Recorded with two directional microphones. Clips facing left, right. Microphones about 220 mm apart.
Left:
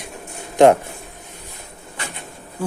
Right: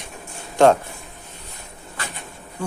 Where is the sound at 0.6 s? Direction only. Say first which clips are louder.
Left 3 dB; 20° left (ahead or behind).